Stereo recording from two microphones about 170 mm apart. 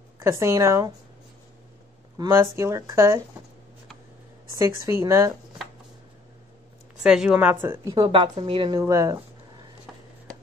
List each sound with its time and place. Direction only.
0.2 s a woman's voice: 15° right (ahead or behind)
2.1 s a woman's voice: 15° right (ahead or behind)
4.6 s a woman's voice: 20° right (ahead or behind)
7.0 s a woman's voice: 5° right (ahead or behind)